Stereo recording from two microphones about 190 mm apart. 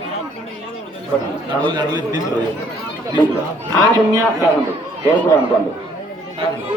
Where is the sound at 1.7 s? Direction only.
25° right (ahead or behind).